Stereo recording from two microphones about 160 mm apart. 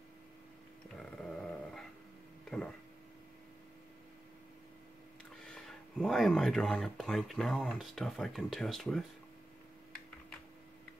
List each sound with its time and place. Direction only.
0.9 s dog: 5° left (ahead or behind)
5.4 s speech: 5° left (ahead or behind)